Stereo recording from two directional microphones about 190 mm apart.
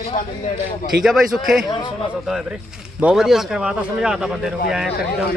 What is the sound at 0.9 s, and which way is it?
Speech, centre (ahead or behind).